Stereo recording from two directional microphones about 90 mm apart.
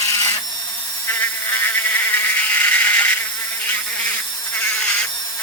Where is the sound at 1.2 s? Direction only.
25° left (ahead or behind).